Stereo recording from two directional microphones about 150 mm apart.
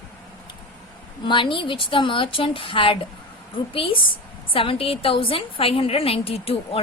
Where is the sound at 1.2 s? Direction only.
35° left (ahead or behind).